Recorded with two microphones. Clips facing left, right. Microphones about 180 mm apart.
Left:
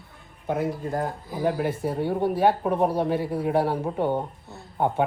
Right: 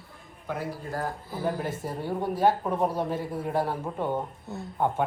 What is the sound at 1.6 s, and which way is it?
A man's voice, 65° left (ahead or behind).